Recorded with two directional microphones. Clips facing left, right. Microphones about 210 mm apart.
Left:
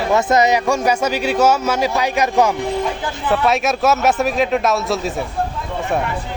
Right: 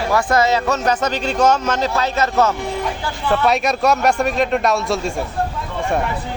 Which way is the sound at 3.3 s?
Centre (ahead or behind).